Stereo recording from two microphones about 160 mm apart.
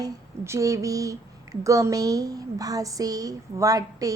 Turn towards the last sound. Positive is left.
turn(degrees=-20)  # may be behind; listen again after turning